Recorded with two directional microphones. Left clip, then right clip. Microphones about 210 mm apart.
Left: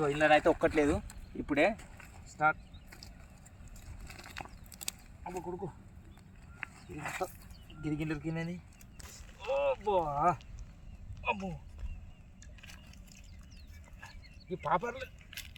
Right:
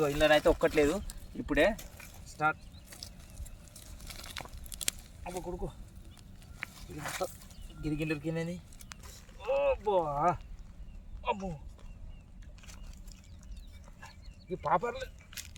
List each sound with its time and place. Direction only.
0.0 s speech: 15° right (ahead or behind)
4.0 s biting: 15° right (ahead or behind)
5.2 s speech: 15° right (ahead or behind)
6.9 s speech: 5° right (ahead or behind)
9.1 s a sound: 5° right (ahead or behind)
11.2 s speech: 5° right (ahead or behind)
14.5 s speech: 10° right (ahead or behind)